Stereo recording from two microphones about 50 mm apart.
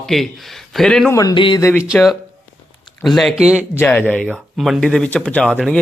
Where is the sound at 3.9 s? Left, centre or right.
Left.